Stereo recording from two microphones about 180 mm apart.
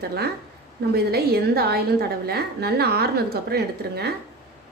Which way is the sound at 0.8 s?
60° right (ahead or behind).